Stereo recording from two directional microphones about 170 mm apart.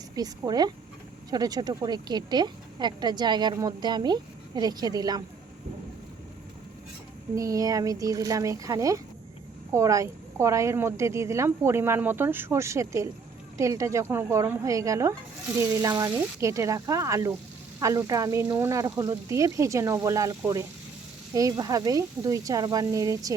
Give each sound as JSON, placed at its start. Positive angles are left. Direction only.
{"t": 0.2, "sound": "speech", "side_deg": -25}
{"t": 7.3, "sound": "a woman's voice", "side_deg": -20}